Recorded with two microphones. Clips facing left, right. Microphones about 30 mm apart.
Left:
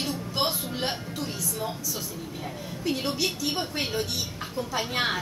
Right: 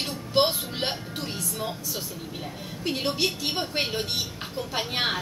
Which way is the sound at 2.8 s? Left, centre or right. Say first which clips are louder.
Right 1 dB; right.